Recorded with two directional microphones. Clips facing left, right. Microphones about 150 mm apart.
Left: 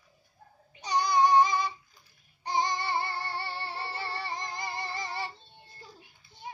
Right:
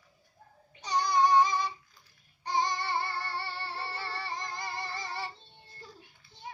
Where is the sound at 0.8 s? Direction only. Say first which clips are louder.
Left 2 dB; 10° left (ahead or behind).